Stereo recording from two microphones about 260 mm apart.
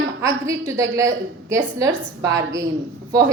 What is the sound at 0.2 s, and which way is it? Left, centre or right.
A woman's voice, centre.